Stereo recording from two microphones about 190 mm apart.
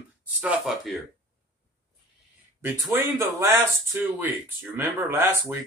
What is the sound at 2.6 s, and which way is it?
Speech, 15° right (ahead or behind).